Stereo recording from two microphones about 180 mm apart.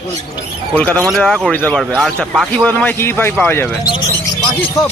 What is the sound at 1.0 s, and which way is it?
A man's voice, centre (ahead or behind).